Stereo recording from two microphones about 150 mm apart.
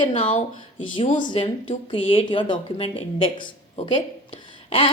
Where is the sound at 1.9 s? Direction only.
35° left (ahead or behind).